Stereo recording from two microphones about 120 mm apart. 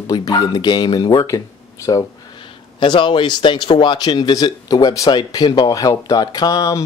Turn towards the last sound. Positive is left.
turn(degrees=30)  # may be behind; listen again after turning